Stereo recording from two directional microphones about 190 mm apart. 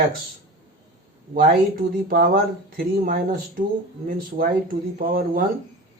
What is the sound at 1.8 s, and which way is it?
Speech, 55° right (ahead or behind).